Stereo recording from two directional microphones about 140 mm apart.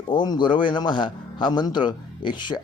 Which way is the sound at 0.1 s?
35° left (ahead or behind).